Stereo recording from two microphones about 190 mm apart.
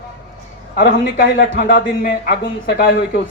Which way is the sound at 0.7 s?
50° left (ahead or behind).